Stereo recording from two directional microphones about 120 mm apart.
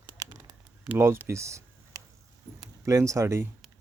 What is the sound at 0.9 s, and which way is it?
Speech, 20° right (ahead or behind).